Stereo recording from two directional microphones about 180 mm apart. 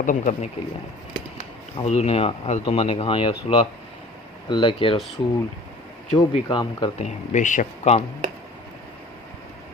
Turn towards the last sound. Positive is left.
turn(degrees=40)  # may be behind; listen again after turning